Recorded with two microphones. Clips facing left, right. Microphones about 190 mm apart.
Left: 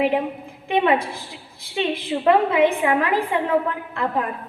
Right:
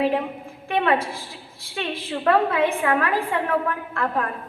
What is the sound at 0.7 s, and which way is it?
A woman's voice, 15° left (ahead or behind).